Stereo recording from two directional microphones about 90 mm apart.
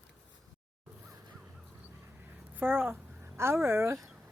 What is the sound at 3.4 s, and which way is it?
Speech, 25° right (ahead or behind).